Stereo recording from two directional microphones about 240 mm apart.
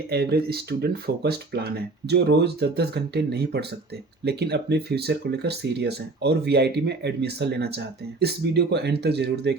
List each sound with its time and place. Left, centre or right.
0.1 s speech: right